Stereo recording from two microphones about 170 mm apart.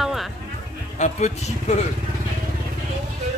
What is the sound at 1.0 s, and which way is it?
Speech, 45° left (ahead or behind).